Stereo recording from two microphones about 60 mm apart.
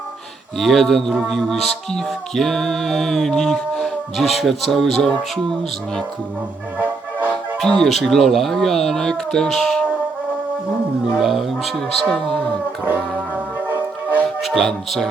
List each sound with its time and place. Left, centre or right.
0.6 s music: centre
6.7 s music: right
7.6 s music: centre
11.2 s music: centre
12.8 s music: right
14.4 s music: centre